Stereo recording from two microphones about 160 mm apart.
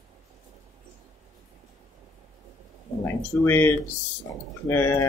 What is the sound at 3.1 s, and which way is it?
Speech, 15° left (ahead or behind).